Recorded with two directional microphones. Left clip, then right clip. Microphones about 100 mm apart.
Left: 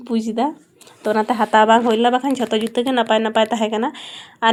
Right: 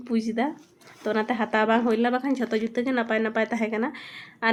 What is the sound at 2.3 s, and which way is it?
Speech, 25° left (ahead or behind).